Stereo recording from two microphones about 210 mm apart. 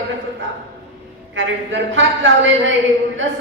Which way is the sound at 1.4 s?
65° right (ahead or behind).